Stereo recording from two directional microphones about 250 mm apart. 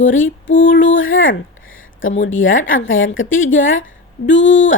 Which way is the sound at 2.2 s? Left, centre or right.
Left.